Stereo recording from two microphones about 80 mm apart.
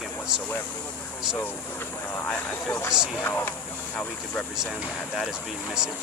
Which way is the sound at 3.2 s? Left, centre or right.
Left.